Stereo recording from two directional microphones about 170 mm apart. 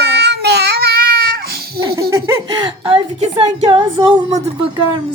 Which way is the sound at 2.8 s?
30° right (ahead or behind).